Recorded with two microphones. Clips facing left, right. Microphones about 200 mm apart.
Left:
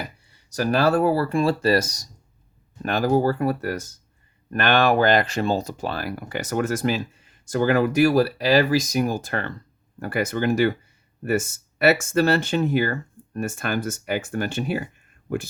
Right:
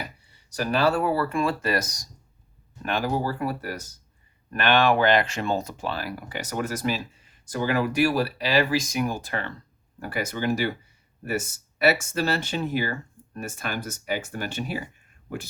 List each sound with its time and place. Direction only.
0.5 s speech: 40° left (ahead or behind)
2.8 s speech: 45° left (ahead or behind)
11.8 s speech: 50° left (ahead or behind)